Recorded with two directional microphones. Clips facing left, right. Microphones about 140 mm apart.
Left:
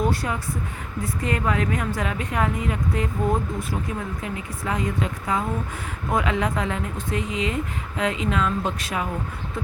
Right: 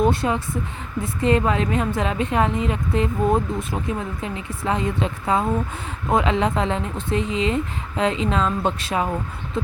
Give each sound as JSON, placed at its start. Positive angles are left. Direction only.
{"t": 0.0, "sound": "a woman's voice", "side_deg": -25}